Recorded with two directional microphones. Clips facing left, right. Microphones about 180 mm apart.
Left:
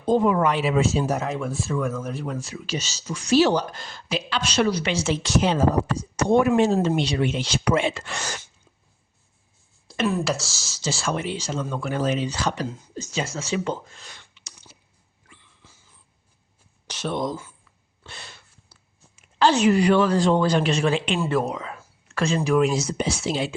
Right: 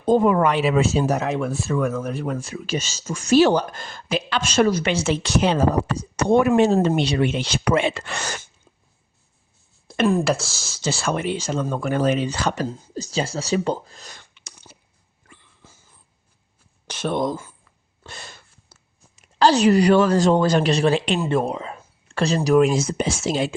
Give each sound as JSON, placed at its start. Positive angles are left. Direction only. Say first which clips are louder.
{"t": 0.0, "sound": "speech", "louder": "right 3 dB", "side_deg": -55}
{"t": 9.8, "sound": "speech", "louder": "right 5 dB", "side_deg": -50}
{"t": 12.6, "sound": "speech", "louder": "right 4 dB", "side_deg": -35}
{"t": 14.3, "sound": "a sound", "louder": "right 3 dB", "side_deg": -55}
{"t": 15.3, "sound": "dog", "louder": "right 3 dB", "side_deg": -45}
{"t": 16.8, "sound": "speech", "louder": "right 4 dB", "side_deg": -55}
{"t": 21.2, "sound": "speech", "louder": "right 2 dB", "side_deg": -25}